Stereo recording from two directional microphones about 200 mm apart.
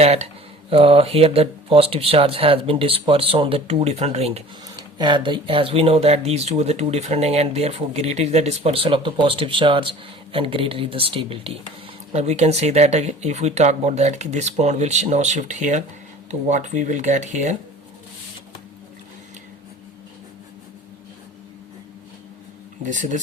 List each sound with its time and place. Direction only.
0.0 s speech: 30° right (ahead or behind)
22.8 s speech: 40° right (ahead or behind)